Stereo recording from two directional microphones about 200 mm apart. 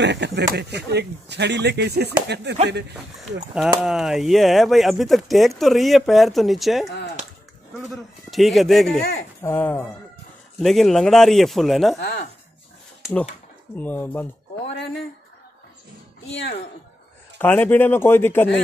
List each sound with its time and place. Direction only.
0.0 s speech: 60° right (ahead or behind)
3.8 s speech: centre (ahead or behind)
12.0 s speech: 60° left (ahead or behind)
13.0 s speech: centre (ahead or behind)
13.7 s speech: 10° left (ahead or behind)
17.4 s speech: 10° left (ahead or behind)